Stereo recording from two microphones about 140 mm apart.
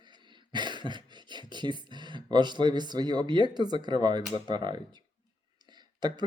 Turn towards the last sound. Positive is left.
turn(degrees=-30)  # may be behind; listen again after turning